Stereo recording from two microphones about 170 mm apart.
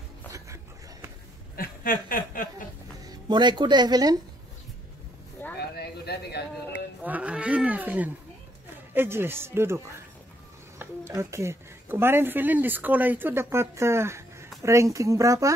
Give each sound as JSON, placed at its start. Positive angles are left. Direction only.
{"t": 1.6, "sound": "snicker", "side_deg": 55}
{"t": 3.1, "sound": "speech", "side_deg": -25}
{"t": 5.6, "sound": "a sound", "side_deg": 70}
{"t": 7.0, "sound": "roaring cats", "side_deg": -10}
{"t": 8.9, "sound": "speech", "side_deg": -15}
{"t": 10.8, "sound": "speech", "side_deg": -15}